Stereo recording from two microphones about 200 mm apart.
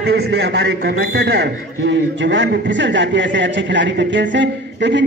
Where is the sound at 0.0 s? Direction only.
55° right (ahead or behind).